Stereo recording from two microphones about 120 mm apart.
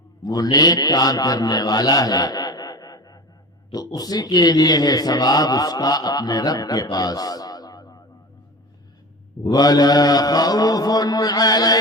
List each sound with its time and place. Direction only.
0.3 s a man's voice: 35° left (ahead or behind)
6.9 s a sound: 30° left (ahead or behind)
9.5 s a man's voice: 35° left (ahead or behind)